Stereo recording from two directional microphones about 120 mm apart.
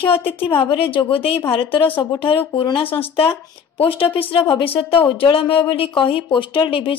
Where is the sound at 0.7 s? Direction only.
45° left (ahead or behind).